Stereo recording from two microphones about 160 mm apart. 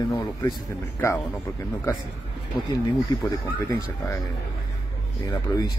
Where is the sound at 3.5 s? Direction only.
20° left (ahead or behind).